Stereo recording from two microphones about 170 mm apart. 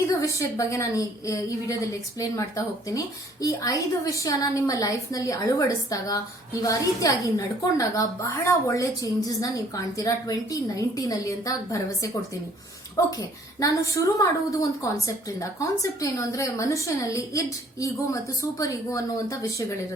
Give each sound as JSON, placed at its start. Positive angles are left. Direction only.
{"t": 0.1, "sound": "a woman's voice", "side_deg": 20}